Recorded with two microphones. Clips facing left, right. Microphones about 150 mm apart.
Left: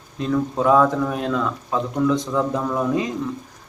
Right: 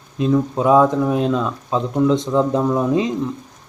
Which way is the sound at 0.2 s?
20° right (ahead or behind).